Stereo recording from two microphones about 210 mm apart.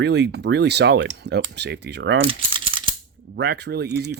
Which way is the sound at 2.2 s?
25° right (ahead or behind).